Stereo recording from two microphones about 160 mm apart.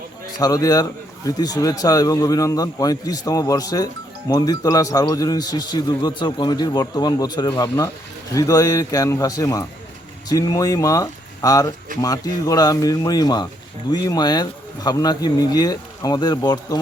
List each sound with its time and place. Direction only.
0.3 s a man's voice: 25° left (ahead or behind)